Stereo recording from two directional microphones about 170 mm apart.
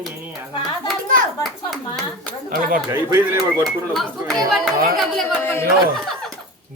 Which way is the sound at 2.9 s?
15° right (ahead or behind).